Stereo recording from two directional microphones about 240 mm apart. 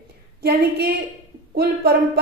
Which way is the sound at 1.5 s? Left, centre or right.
Right.